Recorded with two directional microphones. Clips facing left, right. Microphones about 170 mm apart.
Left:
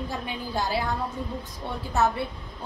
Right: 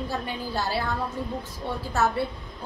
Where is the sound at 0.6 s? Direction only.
15° left (ahead or behind).